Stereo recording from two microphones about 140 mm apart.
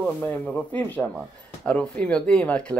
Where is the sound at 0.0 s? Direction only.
5° left (ahead or behind).